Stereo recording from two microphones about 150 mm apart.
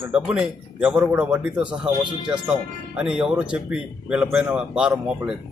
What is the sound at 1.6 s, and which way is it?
Speech, 30° right (ahead or behind).